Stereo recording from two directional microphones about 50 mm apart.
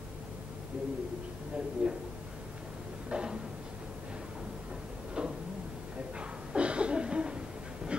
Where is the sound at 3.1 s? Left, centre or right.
Centre.